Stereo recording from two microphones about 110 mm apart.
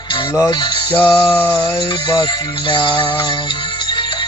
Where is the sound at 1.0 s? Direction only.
5° left (ahead or behind).